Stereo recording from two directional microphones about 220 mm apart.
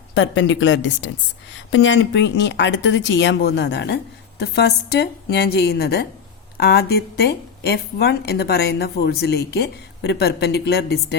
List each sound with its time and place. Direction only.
0.1 s a woman's voice: 55° left (ahead or behind)